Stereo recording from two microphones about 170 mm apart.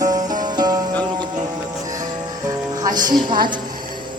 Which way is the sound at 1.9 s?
20° right (ahead or behind).